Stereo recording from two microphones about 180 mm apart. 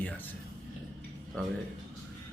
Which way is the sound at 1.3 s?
5° left (ahead or behind).